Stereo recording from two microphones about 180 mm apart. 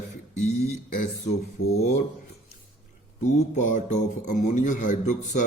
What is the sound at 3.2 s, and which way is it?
Speech, 45° left (ahead or behind).